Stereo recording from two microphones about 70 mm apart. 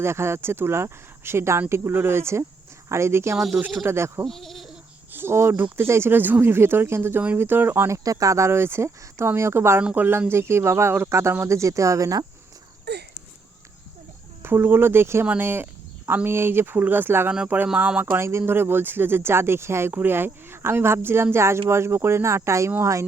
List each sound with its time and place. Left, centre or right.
0.0 s speech: right
3.3 s speech: centre
3.8 s speech: right
4.3 s speech: centre
5.1 s speech: right
7.9 s speech: right
14.4 s speech: right
17.7 s speech: centre
18.0 s speech: right